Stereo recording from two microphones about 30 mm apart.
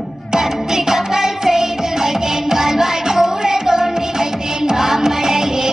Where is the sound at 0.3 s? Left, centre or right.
Centre.